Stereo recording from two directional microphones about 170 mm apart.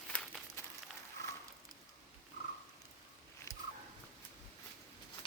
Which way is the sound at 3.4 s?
15° left (ahead or behind).